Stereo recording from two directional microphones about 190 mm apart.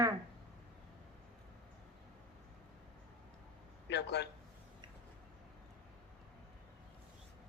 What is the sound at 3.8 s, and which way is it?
Speech, 65° left (ahead or behind).